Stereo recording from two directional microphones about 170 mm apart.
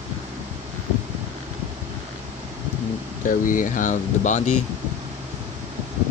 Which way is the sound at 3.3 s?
50° left (ahead or behind).